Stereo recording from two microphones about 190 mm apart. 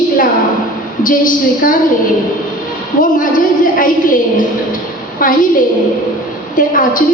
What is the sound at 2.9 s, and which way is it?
A woman's voice, 45° left (ahead or behind).